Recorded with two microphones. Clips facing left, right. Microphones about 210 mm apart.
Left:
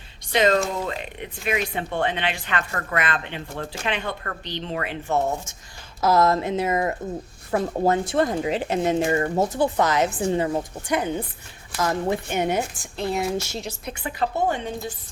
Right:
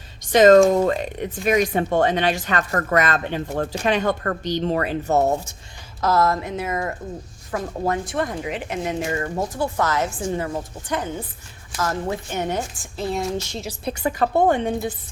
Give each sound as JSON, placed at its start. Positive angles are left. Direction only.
{"t": 0.3, "sound": "speech", "side_deg": -45}
{"t": 6.0, "sound": "a woman's voice", "side_deg": 15}
{"t": 12.7, "sound": "a woman's voice", "side_deg": 0}
{"t": 13.8, "sound": "speech", "side_deg": -45}